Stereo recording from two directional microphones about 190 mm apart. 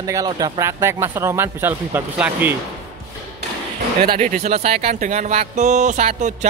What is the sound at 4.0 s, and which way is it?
Speech, 45° right (ahead or behind).